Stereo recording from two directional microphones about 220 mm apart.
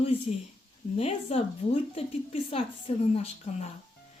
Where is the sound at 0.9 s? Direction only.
25° left (ahead or behind).